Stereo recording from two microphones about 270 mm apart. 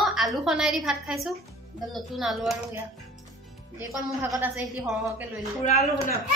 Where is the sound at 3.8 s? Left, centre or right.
Centre.